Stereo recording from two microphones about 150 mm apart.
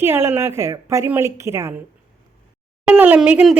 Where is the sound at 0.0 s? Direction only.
15° right (ahead or behind).